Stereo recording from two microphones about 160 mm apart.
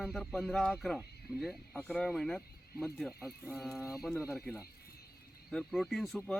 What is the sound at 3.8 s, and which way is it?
Speech, 20° left (ahead or behind).